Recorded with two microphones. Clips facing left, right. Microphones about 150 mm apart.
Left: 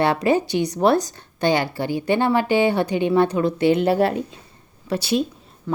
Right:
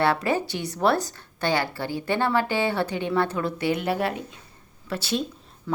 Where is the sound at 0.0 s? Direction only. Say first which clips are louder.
Left 4 dB; 20° left (ahead or behind).